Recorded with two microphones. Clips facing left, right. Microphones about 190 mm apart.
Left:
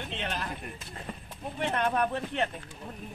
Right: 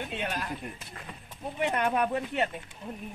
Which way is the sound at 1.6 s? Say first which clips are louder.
Right 1 dB; 10° right (ahead or behind).